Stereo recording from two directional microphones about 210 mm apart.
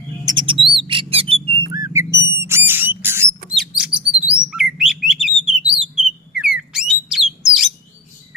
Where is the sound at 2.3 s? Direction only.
10° right (ahead or behind).